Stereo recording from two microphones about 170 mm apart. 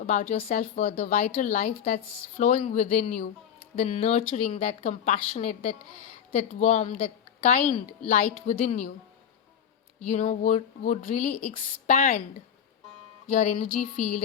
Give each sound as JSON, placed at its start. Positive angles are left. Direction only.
{"t": 0.0, "sound": "a woman's voice", "side_deg": 50}
{"t": 10.1, "sound": "a woman's voice", "side_deg": 50}
{"t": 11.3, "sound": "a woman's voice", "side_deg": 5}
{"t": 11.9, "sound": "a woman's voice", "side_deg": 45}
{"t": 13.3, "sound": "a woman's voice", "side_deg": 45}